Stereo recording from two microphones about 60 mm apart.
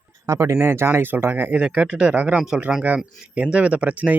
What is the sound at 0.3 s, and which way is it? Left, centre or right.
Speech, right.